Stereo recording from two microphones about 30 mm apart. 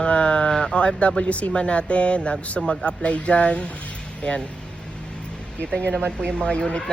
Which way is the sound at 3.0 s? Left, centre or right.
Left.